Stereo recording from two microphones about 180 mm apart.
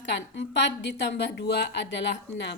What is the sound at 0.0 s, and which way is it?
A woman's voice, 85° left.